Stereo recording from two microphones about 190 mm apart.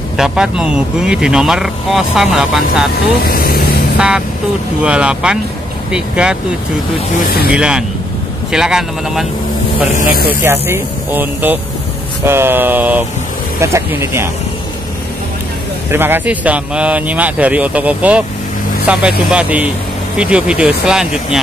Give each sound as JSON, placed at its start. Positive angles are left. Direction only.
{"t": 0.2, "sound": "speech", "side_deg": -5}
{"t": 2.9, "sound": "speech", "side_deg": 50}
{"t": 4.8, "sound": "speech", "side_deg": -5}
{"t": 7.2, "sound": "speech", "side_deg": 55}
{"t": 7.5, "sound": "speech", "side_deg": -5}
{"t": 9.9, "sound": "speech", "side_deg": 50}
{"t": 10.4, "sound": "speech", "side_deg": -10}
{"t": 15.9, "sound": "speech", "side_deg": -10}